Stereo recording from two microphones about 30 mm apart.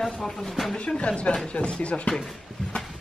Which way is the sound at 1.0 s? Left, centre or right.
Left.